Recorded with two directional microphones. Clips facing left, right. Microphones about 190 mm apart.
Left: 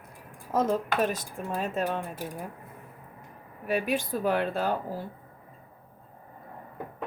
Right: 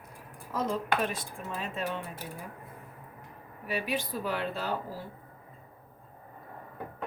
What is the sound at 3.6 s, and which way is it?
Speech, 50° left (ahead or behind).